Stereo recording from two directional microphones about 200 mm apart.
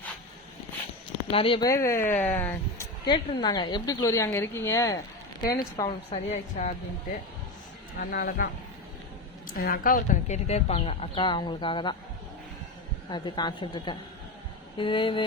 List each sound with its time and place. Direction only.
1.3 s a woman's voice: 25° left (ahead or behind); by 2.8 s 10° left (ahead or behind)
3.1 s a woman's voice: 20° left (ahead or behind)
6.1 s a woman's voice: 35° left (ahead or behind)
7.9 s speech: 50° left (ahead or behind)
9.5 s a woman's voice: 45° left (ahead or behind); by 11.9 s 25° left (ahead or behind)
13.1 s a woman's voice: 20° left (ahead or behind)